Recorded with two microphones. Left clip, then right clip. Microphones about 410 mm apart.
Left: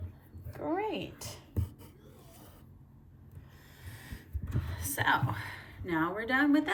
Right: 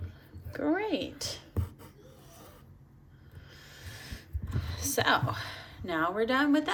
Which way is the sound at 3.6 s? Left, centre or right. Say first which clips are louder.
Right 5 dB; centre.